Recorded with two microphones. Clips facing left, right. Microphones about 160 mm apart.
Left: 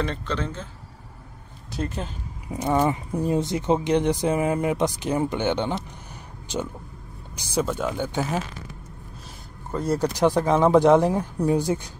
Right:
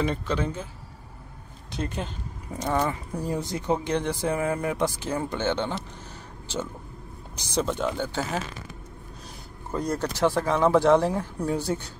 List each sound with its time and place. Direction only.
0.0 s speech: 10° right (ahead or behind)
1.7 s speech: centre (ahead or behind)
2.5 s speech: 15° left (ahead or behind)
9.7 s speech: centre (ahead or behind)
9.9 s speech: 15° left (ahead or behind)